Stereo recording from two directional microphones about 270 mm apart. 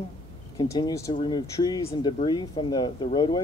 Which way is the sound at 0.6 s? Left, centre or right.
Centre.